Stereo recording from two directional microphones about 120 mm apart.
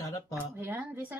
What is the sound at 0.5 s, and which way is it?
Speech, 20° right (ahead or behind).